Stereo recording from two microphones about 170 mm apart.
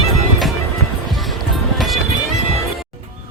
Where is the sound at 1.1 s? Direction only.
Centre (ahead or behind).